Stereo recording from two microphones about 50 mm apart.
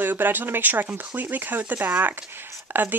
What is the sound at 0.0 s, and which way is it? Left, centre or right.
Speech, right.